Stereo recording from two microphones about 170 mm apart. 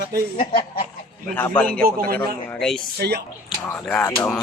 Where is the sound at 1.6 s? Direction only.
5° left (ahead or behind).